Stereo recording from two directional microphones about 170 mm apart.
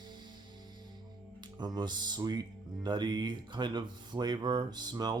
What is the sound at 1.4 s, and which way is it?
Speech, 25° right (ahead or behind).